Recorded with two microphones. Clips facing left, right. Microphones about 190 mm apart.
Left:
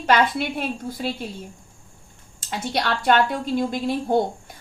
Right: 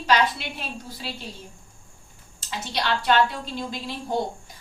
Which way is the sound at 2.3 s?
50° left (ahead or behind).